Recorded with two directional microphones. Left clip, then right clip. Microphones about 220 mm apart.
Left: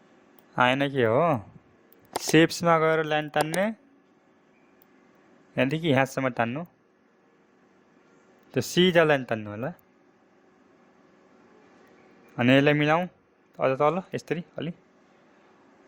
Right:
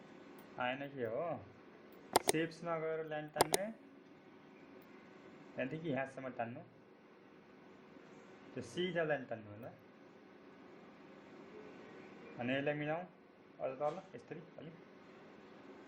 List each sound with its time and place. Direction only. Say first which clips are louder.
0.5 s speech: left 18 dB; 50° left (ahead or behind)
2.0 s a sound: left 1 dB; centre (ahead or behind)
2.3 s speech: left 19 dB; 45° left (ahead or behind)
3.3 s speech: left 4 dB; centre (ahead or behind)
5.5 s speech: left 17 dB; 50° left (ahead or behind)
8.5 s speech: left 18 dB; 50° left (ahead or behind)
12.4 s speech: left 17 dB; 50° left (ahead or behind)